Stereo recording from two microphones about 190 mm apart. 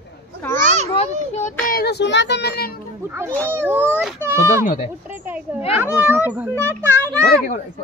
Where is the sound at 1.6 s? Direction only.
55° left (ahead or behind).